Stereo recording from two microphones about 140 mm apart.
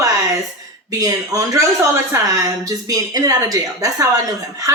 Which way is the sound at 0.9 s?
25° right (ahead or behind).